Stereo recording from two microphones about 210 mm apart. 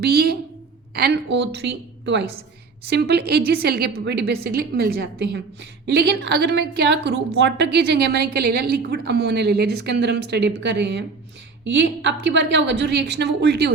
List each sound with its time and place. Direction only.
0.0 s a woman's voice: 50° right (ahead or behind)